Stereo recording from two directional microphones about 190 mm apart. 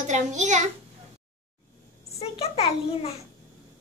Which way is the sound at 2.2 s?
30° left (ahead or behind).